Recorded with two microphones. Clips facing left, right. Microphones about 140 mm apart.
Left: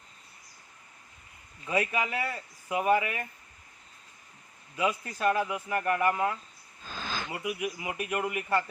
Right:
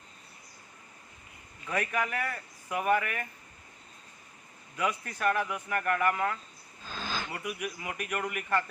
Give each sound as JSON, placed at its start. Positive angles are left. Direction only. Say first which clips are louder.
{"t": 1.6, "sound": "speech", "louder": "left 2 dB", "side_deg": 15}
{"t": 4.8, "sound": "speech", "louder": "left 2 dB", "side_deg": 20}